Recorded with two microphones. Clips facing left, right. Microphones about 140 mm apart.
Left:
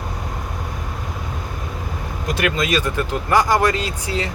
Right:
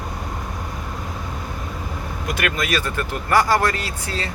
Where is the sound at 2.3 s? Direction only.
25° left (ahead or behind).